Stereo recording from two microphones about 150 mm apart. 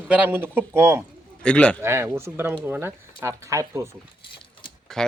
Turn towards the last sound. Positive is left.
turn(degrees=5)  # may be behind; listen again after turning